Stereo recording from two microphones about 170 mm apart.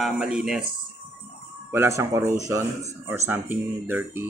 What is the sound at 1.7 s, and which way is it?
Speech, 15° right (ahead or behind).